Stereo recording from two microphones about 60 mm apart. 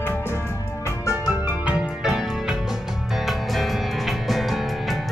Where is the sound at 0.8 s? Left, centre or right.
Left.